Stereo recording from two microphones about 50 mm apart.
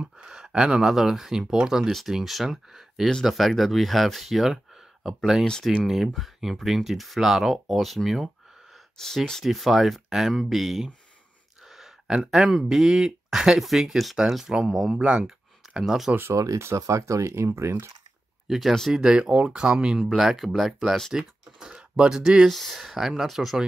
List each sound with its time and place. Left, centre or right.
0.0 s a sound: centre
0.4 s speech: centre
5.4 s speech: centre
5.9 s speech: centre
8.9 s speech: centre
9.4 s speech: centre
11.6 s a sound: centre
12.4 s speech: centre
15.1 s a sound: centre
16.4 s speech: right
18.5 s speech: centre
20.0 s speech: centre
21.1 s speech: centre
22.5 s speech: centre